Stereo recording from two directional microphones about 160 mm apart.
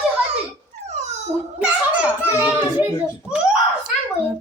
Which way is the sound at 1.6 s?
10° right (ahead or behind).